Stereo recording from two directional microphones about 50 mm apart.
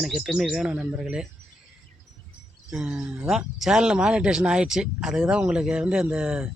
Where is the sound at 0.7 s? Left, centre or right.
Right.